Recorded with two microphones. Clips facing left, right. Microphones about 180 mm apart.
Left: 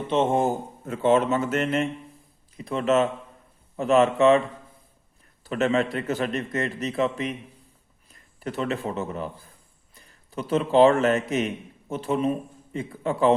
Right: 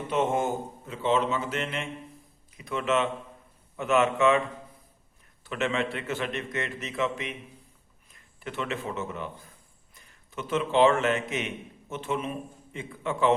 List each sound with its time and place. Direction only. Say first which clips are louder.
0.1 s a man's voice: left 4 dB; 30° left (ahead or behind)
0.9 s a man's voice: left 6 dB; 50° left (ahead or behind)